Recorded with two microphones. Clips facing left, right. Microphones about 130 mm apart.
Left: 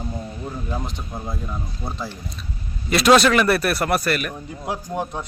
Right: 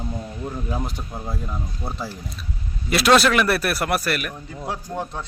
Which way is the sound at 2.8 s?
Centre (ahead or behind).